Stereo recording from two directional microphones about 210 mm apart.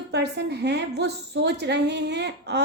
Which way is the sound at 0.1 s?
50° right (ahead or behind).